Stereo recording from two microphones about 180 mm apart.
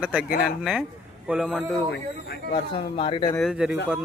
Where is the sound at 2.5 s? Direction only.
30° left (ahead or behind).